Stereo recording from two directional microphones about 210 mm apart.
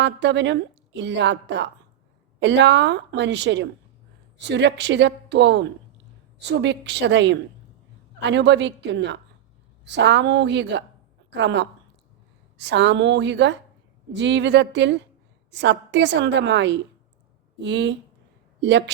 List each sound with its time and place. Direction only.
0.0 s a woman's voice: 55° right (ahead or behind)